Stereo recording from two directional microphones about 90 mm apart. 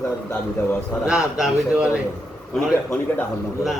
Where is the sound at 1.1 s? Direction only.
5° right (ahead or behind).